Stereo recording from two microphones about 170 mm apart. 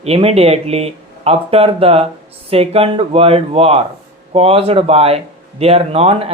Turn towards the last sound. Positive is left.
turn(degrees=-35)  # may be behind; listen again after turning